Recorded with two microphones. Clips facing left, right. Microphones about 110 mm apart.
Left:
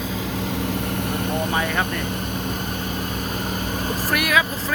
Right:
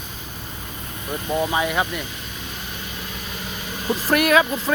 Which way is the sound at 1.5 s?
15° right (ahead or behind).